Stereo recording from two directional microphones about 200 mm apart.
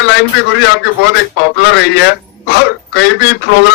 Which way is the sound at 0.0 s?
60° left (ahead or behind).